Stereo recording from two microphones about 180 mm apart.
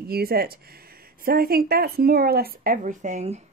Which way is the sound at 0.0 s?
60° right (ahead or behind).